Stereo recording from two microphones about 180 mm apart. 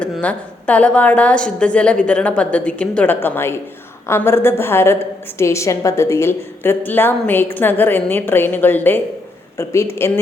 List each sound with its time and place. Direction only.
0.0 s a woman's voice: 5° left (ahead or behind)